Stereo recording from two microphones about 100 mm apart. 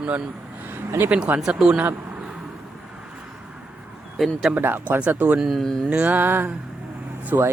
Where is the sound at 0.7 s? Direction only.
20° right (ahead or behind).